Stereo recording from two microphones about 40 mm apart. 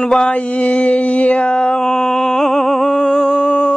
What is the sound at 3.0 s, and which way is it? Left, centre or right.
Humming, left.